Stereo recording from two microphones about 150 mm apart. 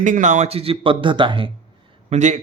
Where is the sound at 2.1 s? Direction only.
50° right (ahead or behind).